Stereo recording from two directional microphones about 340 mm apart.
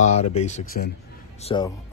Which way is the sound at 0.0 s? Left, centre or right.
Centre.